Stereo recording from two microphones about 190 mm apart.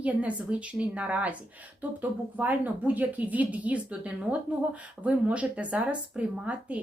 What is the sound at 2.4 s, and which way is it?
Speech, 10° right (ahead or behind).